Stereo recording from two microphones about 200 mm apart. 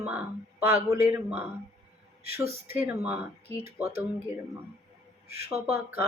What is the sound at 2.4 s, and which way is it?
Speech, 30° right (ahead or behind).